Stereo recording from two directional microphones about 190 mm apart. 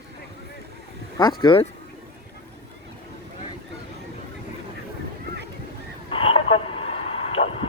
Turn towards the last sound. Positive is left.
turn(degrees=30)  # may be behind; listen again after turning